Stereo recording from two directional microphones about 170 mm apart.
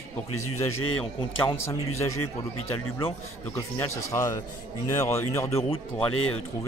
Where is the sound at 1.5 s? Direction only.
20° left (ahead or behind).